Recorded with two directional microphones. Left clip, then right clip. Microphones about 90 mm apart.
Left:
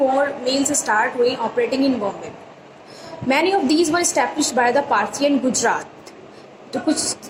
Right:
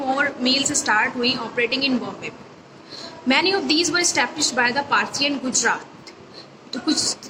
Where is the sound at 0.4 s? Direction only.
30° left (ahead or behind).